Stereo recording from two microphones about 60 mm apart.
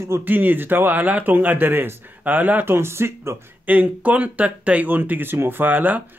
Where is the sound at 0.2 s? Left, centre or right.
Right.